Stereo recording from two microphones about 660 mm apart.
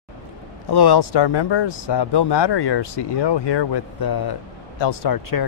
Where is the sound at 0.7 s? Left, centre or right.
Left.